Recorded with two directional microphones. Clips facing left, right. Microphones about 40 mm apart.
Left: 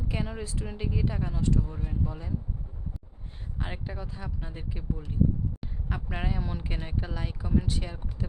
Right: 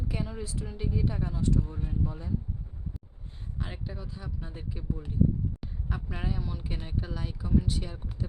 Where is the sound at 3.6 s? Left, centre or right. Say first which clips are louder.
Left 3 dB; left.